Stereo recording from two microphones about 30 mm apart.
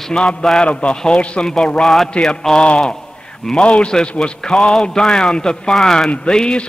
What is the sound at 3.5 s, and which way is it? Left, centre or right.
A man's voice, left.